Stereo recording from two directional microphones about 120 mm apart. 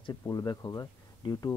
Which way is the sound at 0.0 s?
30° left (ahead or behind).